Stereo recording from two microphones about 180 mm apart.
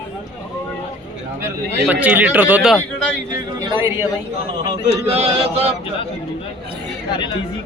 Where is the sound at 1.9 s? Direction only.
10° right (ahead or behind).